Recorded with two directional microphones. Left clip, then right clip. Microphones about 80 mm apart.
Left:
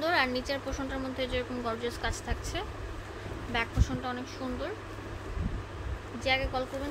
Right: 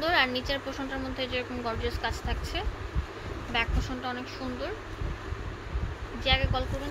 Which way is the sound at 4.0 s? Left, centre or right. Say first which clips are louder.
Right 3 dB; centre.